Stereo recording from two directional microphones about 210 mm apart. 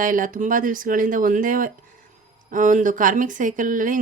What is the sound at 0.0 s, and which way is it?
Speech, 40° right (ahead or behind).